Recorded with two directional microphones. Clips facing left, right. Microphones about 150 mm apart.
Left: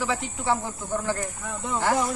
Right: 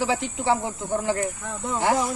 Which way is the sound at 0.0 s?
25° right (ahead or behind).